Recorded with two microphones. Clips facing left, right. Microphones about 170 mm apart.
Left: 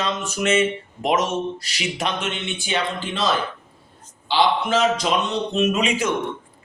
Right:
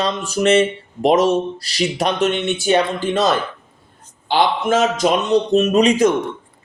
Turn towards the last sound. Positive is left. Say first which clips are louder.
# right 7 dB
turn(degrees=-40)  # may be behind; listen again after turning